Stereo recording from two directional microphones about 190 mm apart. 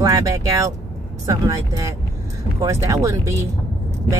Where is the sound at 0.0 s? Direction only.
20° right (ahead or behind).